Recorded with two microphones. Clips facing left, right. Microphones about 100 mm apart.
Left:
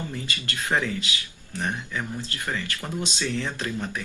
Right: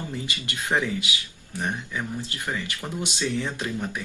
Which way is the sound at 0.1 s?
15° right (ahead or behind).